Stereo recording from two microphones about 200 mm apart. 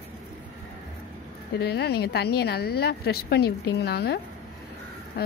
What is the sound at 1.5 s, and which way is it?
A woman's voice, 55° left (ahead or behind).